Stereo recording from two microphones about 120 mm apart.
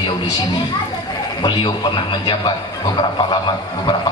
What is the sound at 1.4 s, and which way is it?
A man's voice, 40° left (ahead or behind).